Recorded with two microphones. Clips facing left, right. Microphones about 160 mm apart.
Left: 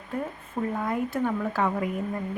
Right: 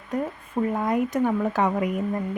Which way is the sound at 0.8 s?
20° right (ahead or behind).